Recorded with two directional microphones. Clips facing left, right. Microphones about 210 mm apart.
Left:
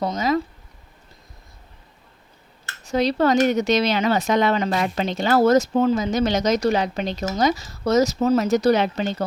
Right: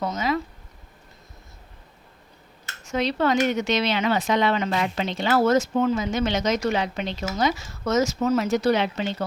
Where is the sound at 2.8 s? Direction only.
35° left (ahead or behind).